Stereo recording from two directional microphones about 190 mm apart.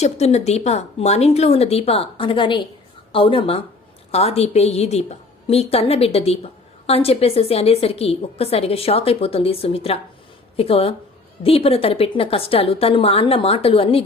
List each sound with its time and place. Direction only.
0.0 s a woman's voice: 35° left (ahead or behind)